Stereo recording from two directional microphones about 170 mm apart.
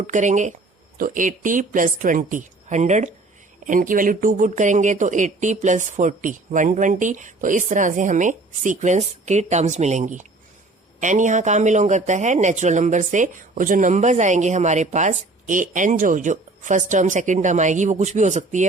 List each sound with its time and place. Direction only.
0.1 s speech: 45° right (ahead or behind)
3.7 s speech: 55° right (ahead or behind)